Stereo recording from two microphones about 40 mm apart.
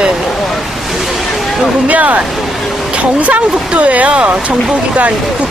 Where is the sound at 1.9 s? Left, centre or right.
Right.